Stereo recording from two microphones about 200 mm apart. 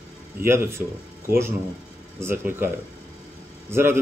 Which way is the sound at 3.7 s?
10° right (ahead or behind).